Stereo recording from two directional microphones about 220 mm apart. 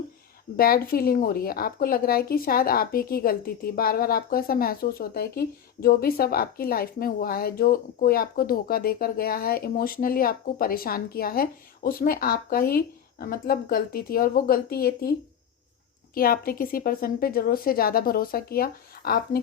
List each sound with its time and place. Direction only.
0.5 s a woman's voice: 40° left (ahead or behind)
16.1 s a woman's voice: 40° left (ahead or behind)